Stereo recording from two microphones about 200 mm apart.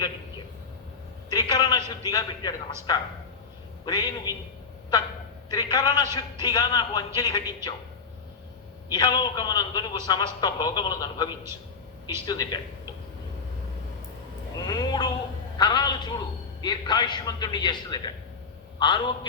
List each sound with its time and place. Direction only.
1.3 s a man's voice: 20° left (ahead or behind)
5.5 s speech: 20° left (ahead or behind)
8.9 s speech: 20° left (ahead or behind)
12.3 s speech: 20° left (ahead or behind)
14.6 s a sound: 20° left (ahead or behind)
15.5 s a man's voice: 20° left (ahead or behind)